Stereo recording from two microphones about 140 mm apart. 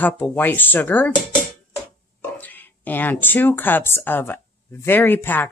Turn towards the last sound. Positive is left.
turn(degrees=15)  # may be behind; listen again after turning